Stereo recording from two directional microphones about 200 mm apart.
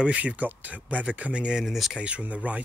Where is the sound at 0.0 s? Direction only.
5° right (ahead or behind).